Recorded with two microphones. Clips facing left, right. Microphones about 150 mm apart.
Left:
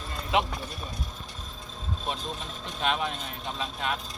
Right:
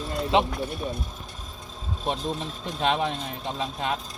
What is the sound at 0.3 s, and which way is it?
Speech, 25° right (ahead or behind).